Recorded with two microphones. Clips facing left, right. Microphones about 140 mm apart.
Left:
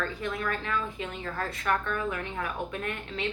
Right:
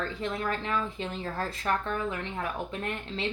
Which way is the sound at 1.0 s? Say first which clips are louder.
Right 1 dB; 30° right (ahead or behind).